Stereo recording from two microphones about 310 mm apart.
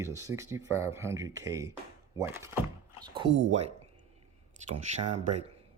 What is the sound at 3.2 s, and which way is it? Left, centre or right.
Speech, right.